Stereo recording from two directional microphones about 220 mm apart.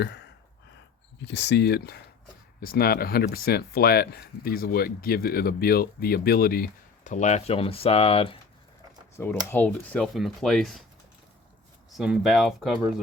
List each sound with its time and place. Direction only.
0.0 s a sound: 50° left (ahead or behind)
1.2 s speech: 55° left (ahead or behind); by 8.4 s 25° left (ahead or behind)
9.1 s speech: 10° left (ahead or behind)
11.9 s speech: centre (ahead or behind)